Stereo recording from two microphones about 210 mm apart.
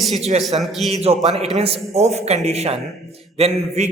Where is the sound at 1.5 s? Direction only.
30° right (ahead or behind).